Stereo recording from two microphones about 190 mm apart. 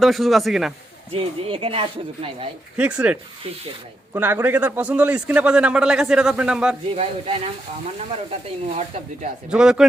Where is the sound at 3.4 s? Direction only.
30° right (ahead or behind).